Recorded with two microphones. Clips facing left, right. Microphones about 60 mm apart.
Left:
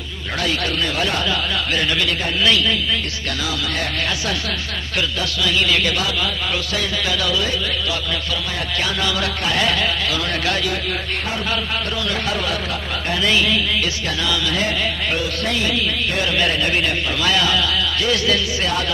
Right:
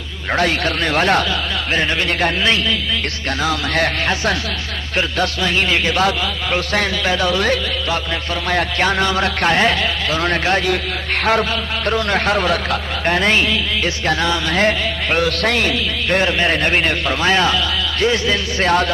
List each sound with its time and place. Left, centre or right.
0.4 s a man's voice: right
1.7 s a man's voice: right
3.4 s a man's voice: right
4.1 s a man's voice: right
7.3 s a man's voice: right
8.7 s a man's voice: right
11.9 s a man's voice: right
16.2 s a man's voice: right
18.6 s a man's voice: right